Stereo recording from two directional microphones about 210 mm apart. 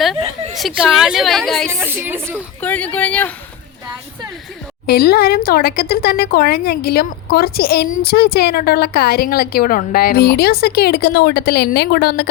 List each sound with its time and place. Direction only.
0.5 s a woman's voice: centre (ahead or behind)
1.7 s speech: 10° right (ahead or behind)
2.6 s speech: 5° left (ahead or behind)
4.9 s speech: 50° left (ahead or behind)